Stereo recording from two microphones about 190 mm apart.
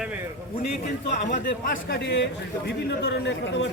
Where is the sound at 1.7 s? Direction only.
65° left (ahead or behind).